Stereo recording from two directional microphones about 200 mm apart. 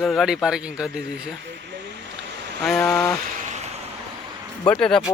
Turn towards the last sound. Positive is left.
turn(degrees=5)  # may be behind; listen again after turning